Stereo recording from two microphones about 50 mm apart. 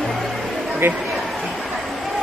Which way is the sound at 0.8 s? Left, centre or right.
Right.